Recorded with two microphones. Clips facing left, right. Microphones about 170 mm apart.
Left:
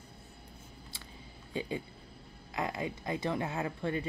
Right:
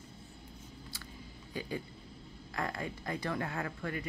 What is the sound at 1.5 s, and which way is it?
Speech, 20° left (ahead or behind).